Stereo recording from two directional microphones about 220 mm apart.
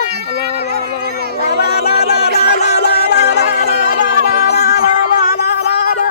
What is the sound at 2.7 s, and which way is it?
Music, 45° left (ahead or behind).